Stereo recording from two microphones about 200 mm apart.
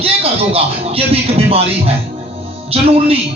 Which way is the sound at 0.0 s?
30° right (ahead or behind).